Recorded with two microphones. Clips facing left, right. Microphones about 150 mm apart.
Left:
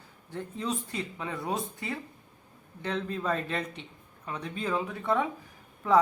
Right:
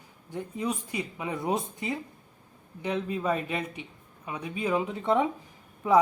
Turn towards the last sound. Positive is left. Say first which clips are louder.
# right 2 dB
turn(degrees=-15)  # may be behind; listen again after turning